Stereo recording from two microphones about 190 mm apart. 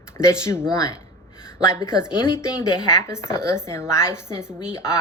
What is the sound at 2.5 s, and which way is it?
A woman's voice, 15° left (ahead or behind).